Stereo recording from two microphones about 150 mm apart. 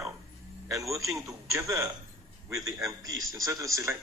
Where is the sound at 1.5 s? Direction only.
20° right (ahead or behind).